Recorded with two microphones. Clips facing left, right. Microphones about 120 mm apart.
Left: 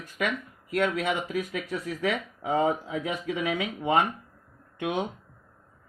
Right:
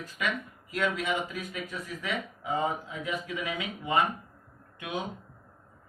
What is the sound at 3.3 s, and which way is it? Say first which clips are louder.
Speech: left 6 dB; 70° left (ahead or behind).